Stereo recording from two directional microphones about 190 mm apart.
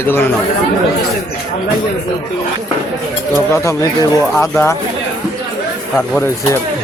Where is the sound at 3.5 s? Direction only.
15° left (ahead or behind).